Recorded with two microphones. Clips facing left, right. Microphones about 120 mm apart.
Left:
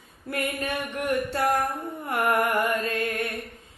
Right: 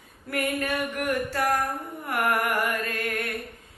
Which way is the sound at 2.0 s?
25° left (ahead or behind).